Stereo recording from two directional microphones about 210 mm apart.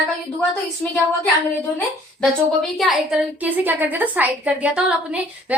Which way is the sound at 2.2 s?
Centre (ahead or behind).